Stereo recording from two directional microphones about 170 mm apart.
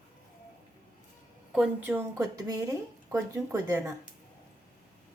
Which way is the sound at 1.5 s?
5° right (ahead or behind).